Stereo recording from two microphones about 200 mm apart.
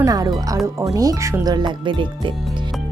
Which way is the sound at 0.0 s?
20° right (ahead or behind).